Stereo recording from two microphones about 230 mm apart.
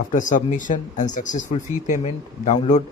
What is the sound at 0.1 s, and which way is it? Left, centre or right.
Speech, left.